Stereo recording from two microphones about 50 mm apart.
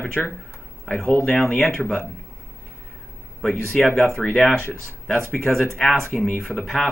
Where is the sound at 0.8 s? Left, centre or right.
Centre.